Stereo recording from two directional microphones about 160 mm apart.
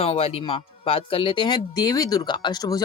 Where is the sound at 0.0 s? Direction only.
40° left (ahead or behind).